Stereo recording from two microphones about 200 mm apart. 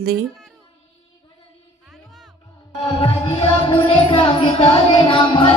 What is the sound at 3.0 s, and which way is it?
Speech, 25° left (ahead or behind).